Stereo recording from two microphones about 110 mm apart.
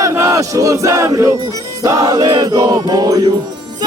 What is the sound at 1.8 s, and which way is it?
Music, 30° right (ahead or behind).